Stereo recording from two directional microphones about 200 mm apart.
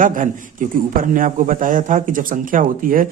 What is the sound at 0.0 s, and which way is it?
A man's voice, 40° right (ahead or behind).